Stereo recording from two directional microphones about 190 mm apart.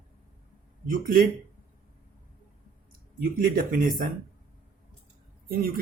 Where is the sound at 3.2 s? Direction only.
50° right (ahead or behind).